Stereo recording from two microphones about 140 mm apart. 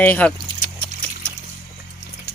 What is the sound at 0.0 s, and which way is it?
Speech, 10° left (ahead or behind).